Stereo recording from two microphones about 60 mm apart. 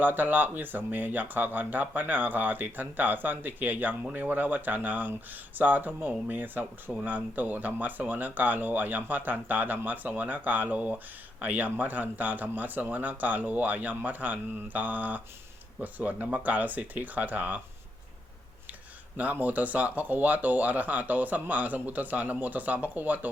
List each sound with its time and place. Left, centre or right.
0.0 s speech: right
19.1 s speech: right